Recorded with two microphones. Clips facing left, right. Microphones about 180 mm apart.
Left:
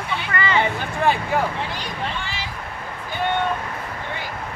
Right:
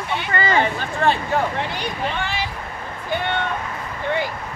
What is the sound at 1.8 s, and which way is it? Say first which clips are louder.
Speech: right 4 dB; 60° right (ahead or behind).